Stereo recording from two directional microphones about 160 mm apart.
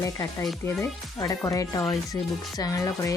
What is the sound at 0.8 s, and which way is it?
Speech, 20° left (ahead or behind).